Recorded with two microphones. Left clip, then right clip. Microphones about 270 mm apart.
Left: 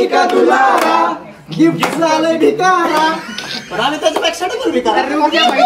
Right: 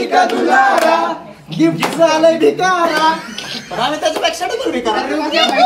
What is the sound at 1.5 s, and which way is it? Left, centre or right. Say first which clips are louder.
Speech: left 2 dB; centre.